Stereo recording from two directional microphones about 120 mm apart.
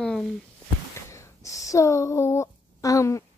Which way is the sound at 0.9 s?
25° left (ahead or behind).